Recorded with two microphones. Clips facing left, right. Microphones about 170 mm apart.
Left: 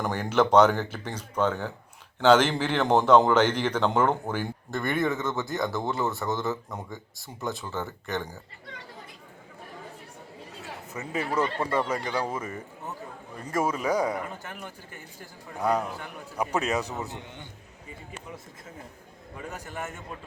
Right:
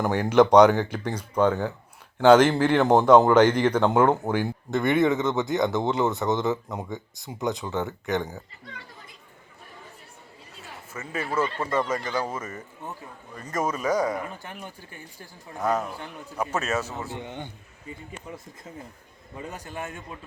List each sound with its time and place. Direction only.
0.0 s a man's voice: 10° right (ahead or behind)
10.9 s speech: 15° left (ahead or behind)
14.2 s a man's voice: 15° right (ahead or behind)
15.2 s speech: 10° left (ahead or behind)
17.2 s a man's voice: 60° right (ahead or behind)
19.5 s a man's voice: 15° right (ahead or behind)